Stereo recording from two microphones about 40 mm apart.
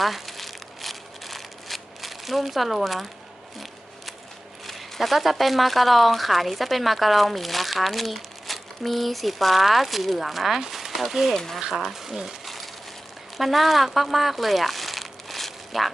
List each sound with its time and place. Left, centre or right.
0.0 s crumpling: centre
4.6 s speech: centre
11.3 s speech: centre
11.7 s speech: centre